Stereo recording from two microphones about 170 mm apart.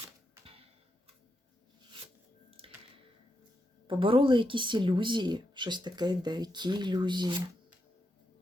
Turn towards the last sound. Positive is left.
turn(degrees=-25)  # may be behind; listen again after turning